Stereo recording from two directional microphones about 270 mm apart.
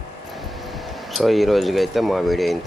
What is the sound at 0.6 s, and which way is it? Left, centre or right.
Speech, centre.